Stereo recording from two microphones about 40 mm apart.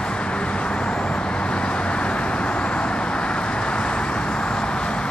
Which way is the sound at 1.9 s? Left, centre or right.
Left.